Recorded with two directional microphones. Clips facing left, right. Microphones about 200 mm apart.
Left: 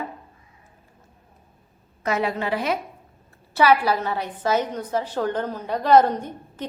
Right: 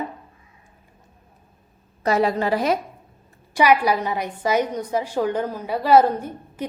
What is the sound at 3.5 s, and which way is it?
A woman's voice, 15° right (ahead or behind).